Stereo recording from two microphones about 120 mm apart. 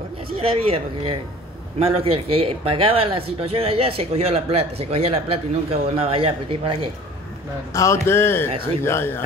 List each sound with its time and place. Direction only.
0.4 s speech: 50° right (ahead or behind)
7.7 s a man's voice: 25° left (ahead or behind)